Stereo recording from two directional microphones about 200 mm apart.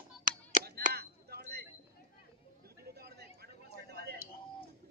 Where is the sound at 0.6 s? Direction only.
45° right (ahead or behind).